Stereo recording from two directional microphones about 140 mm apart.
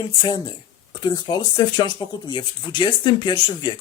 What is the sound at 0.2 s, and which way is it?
Speech, 30° left (ahead or behind).